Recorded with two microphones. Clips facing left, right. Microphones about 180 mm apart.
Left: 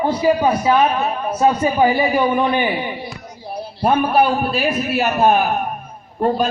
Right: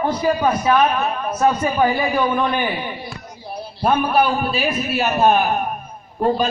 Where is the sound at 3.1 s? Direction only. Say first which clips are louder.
Left 2 dB; 15° left (ahead or behind).